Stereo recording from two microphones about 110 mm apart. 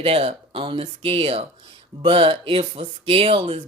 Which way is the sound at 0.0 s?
60° right (ahead or behind).